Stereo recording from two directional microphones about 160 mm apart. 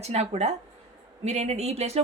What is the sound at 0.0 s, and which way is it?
Speech, 40° right (ahead or behind).